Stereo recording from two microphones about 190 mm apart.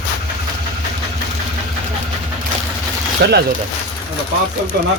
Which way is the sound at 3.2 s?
60° right (ahead or behind).